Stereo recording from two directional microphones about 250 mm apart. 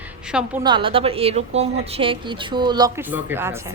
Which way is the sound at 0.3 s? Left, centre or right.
Centre.